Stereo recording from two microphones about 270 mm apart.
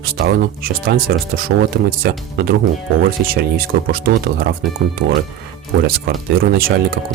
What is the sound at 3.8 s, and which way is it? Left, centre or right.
Speech, right.